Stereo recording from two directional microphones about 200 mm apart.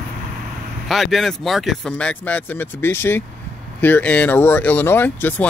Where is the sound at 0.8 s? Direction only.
Centre (ahead or behind).